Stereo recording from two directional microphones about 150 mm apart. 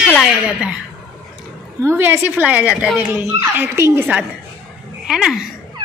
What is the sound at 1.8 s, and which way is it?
A woman's voice, 15° right (ahead or behind).